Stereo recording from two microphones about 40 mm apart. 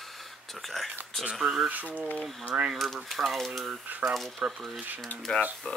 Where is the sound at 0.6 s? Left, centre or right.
Centre.